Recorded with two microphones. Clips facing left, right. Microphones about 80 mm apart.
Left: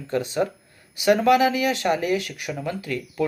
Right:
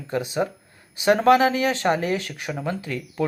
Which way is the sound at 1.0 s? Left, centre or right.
Right.